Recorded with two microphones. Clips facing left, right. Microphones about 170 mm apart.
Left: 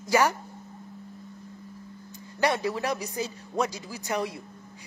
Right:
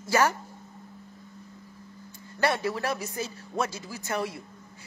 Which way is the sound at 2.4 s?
15° left (ahead or behind).